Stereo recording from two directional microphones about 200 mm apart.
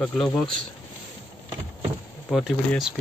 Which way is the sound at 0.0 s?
5° left (ahead or behind).